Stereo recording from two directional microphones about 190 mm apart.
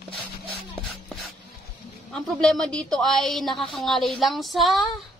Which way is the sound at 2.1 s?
5° left (ahead or behind).